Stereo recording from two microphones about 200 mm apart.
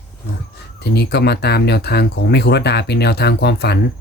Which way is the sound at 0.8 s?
55° left (ahead or behind).